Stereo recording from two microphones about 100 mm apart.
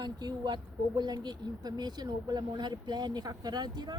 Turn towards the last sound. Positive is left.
turn(degrees=-45)  # may be behind; listen again after turning